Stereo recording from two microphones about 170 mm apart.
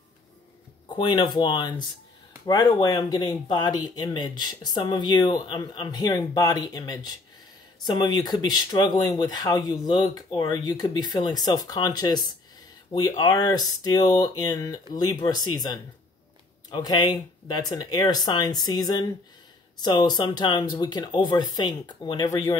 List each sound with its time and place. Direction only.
0.8 s speech: 25° left (ahead or behind)